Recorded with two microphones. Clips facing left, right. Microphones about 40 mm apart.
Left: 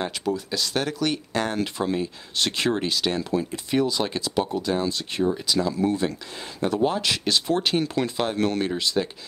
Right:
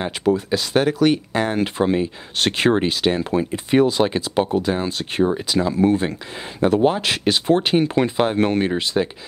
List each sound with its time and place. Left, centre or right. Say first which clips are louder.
0.2 s speech: right 7 dB; right
1.6 s speech: right 6 dB; right